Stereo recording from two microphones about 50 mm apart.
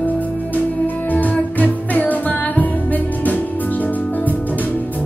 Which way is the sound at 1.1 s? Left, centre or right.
Left.